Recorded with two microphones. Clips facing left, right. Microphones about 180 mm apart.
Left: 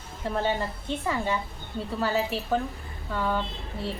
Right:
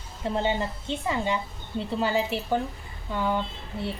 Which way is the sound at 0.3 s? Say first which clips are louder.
Right 1 dB; 20° right (ahead or behind).